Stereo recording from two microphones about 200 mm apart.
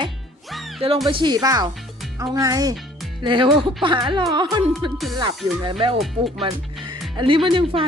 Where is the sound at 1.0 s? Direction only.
20° right (ahead or behind).